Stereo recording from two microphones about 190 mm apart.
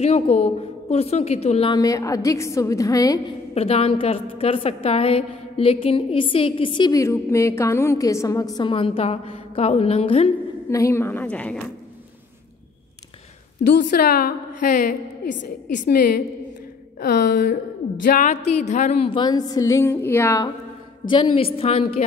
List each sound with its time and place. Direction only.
0.0 s a woman's voice: 35° left (ahead or behind); by 3.2 s 20° left (ahead or behind)
3.5 s a woman's voice: 30° left (ahead or behind)
10.7 s a woman's voice: 15° left (ahead or behind)
13.8 s a woman's voice: 50° left (ahead or behind)
17.0 s speech: 60° left (ahead or behind)
18.0 s a woman's voice: 45° left (ahead or behind)